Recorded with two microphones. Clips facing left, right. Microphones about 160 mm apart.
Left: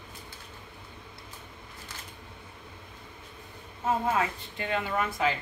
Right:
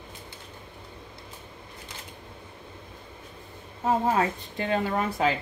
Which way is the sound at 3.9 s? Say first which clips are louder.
Right 3 dB; 40° right (ahead or behind).